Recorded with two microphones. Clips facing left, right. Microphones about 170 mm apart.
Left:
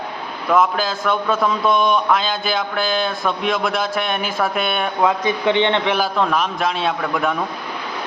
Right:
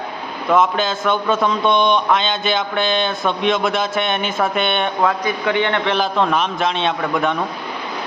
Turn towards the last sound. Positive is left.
turn(degrees=0)  # may be behind; listen again after turning